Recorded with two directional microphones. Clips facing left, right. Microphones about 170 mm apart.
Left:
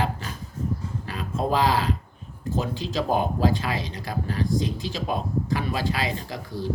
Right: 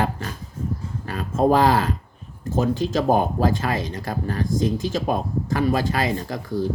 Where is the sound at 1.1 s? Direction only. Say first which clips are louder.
Right 7 dB; 45° right (ahead or behind).